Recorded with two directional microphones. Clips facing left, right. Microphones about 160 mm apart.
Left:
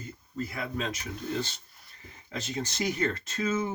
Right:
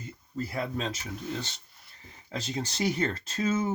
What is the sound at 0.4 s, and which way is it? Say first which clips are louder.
Speech: right 1 dB; 35° right (ahead or behind).